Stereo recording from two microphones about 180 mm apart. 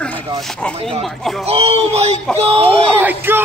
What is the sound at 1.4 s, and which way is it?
Speech, 35° right (ahead or behind).